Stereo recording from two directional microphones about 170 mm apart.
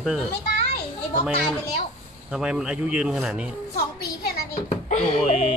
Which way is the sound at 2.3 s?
5° right (ahead or behind).